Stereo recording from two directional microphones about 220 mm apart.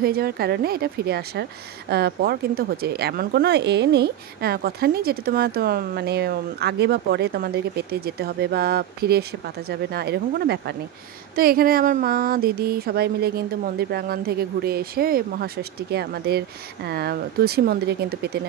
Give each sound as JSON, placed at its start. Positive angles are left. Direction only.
{"t": 0.0, "sound": "speech", "side_deg": -45}